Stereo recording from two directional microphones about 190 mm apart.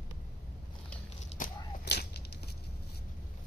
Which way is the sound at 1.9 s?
60° left (ahead or behind).